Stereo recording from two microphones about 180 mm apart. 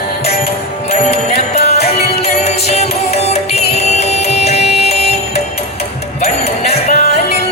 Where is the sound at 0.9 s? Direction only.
35° left (ahead or behind).